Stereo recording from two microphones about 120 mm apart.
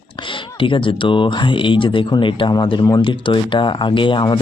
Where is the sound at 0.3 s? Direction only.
45° left (ahead or behind).